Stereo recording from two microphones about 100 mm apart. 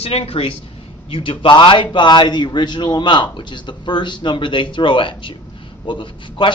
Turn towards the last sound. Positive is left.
turn(degrees=55)  # may be behind; listen again after turning